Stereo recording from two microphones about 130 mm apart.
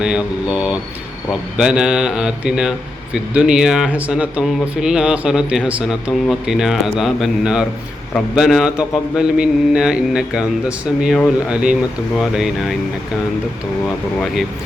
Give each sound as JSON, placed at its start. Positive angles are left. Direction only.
{"t": 0.0, "sound": "speech", "side_deg": -5}